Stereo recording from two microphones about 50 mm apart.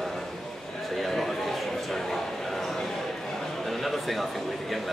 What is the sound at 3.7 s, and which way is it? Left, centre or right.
Speech, centre.